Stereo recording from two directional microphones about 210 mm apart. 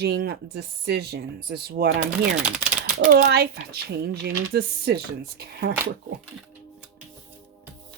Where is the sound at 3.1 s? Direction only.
50° right (ahead or behind).